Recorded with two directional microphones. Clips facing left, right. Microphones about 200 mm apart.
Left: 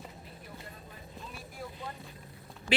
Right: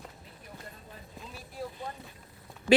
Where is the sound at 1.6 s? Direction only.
35° right (ahead or behind).